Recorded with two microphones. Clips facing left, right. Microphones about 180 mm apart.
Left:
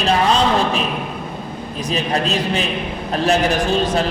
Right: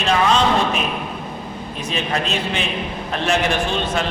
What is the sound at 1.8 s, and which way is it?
A man's voice, 35° left (ahead or behind).